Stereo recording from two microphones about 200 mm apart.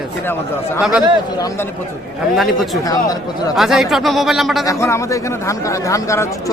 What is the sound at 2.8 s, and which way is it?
Speech, 20° left (ahead or behind).